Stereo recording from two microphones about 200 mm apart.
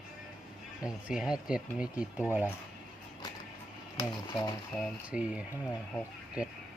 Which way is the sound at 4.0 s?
20° left (ahead or behind).